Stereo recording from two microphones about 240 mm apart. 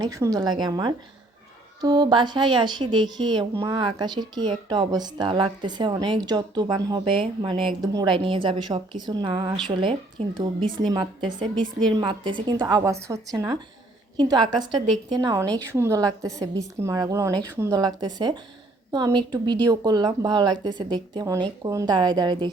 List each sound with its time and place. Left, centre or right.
0.0 s a woman's voice: centre